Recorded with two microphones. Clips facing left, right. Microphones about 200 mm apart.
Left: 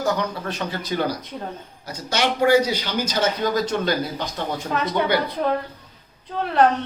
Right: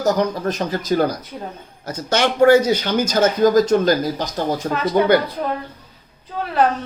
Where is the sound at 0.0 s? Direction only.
40° right (ahead or behind).